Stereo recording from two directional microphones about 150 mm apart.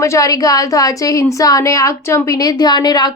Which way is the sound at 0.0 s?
20° left (ahead or behind).